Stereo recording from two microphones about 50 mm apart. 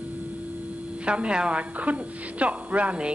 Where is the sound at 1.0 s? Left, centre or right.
Right.